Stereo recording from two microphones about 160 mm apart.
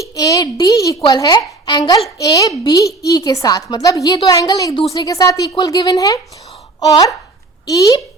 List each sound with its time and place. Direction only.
0.0 s a child's voice: 20° left (ahead or behind)